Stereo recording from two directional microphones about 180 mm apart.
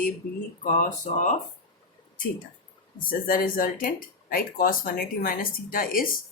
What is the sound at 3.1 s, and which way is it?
Speech, 50° left (ahead or behind).